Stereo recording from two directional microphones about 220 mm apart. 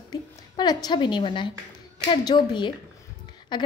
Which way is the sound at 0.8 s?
20° left (ahead or behind).